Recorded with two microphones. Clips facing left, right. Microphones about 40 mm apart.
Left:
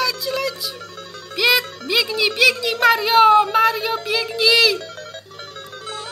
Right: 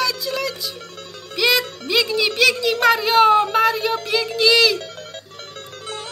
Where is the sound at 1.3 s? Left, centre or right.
Centre.